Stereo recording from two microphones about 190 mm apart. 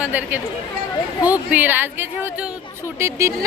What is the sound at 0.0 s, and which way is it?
A woman's voice, 10° right (ahead or behind).